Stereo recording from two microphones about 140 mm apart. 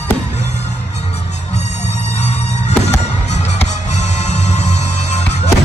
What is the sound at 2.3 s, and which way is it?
Music, 50° left (ahead or behind).